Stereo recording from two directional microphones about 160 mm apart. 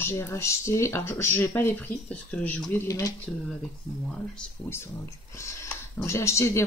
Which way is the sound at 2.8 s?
20° left (ahead or behind).